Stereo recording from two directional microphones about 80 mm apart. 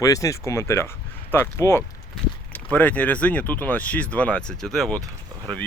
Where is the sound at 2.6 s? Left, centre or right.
Centre.